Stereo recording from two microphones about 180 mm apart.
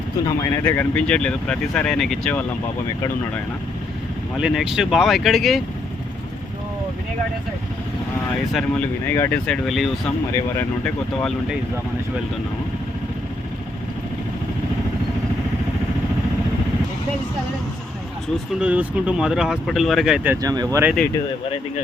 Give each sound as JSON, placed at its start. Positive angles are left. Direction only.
{"t": 0.3, "sound": "speech", "side_deg": 15}
{"t": 4.4, "sound": "speech", "side_deg": -5}
{"t": 8.5, "sound": "speech", "side_deg": 10}
{"t": 18.6, "sound": "speech", "side_deg": -5}
{"t": 20.4, "sound": "speech", "side_deg": -20}